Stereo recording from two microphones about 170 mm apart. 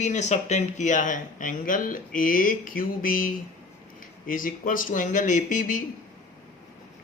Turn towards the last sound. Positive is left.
turn(degrees=50)  # may be behind; listen again after turning